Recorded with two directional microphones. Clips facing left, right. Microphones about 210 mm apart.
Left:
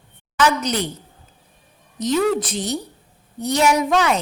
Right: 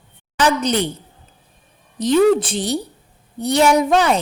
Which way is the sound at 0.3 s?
30° right (ahead or behind).